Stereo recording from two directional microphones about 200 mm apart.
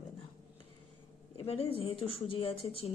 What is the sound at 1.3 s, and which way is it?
Speech, 30° left (ahead or behind).